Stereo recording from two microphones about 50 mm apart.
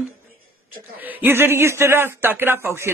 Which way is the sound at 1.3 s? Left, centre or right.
Right.